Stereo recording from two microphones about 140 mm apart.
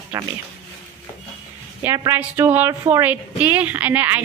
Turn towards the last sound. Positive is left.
turn(degrees=-10)  # may be behind; listen again after turning